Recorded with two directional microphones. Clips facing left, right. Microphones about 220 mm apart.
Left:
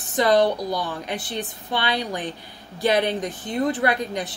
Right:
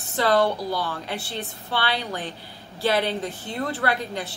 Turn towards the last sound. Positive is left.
turn(degrees=15)  # may be behind; listen again after turning